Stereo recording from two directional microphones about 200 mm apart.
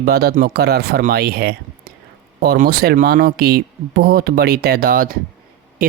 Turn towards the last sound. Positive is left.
turn(degrees=-45)  # may be behind; listen again after turning